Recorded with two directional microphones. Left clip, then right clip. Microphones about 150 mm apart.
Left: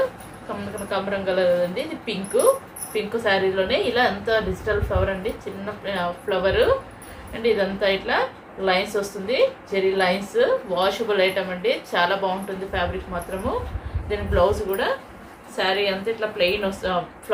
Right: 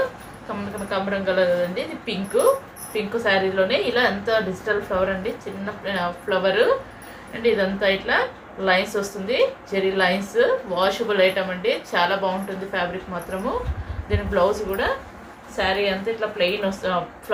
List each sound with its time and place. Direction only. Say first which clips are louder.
0.9 s a woman's voice: right 1 dB; 5° left (ahead or behind)
14.1 s a woman's voice: even; 5° left (ahead or behind)